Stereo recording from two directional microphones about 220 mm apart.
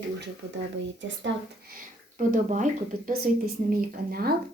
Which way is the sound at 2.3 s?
35° right (ahead or behind).